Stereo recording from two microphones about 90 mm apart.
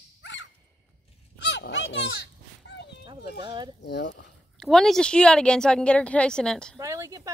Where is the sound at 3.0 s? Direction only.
60° right (ahead or behind).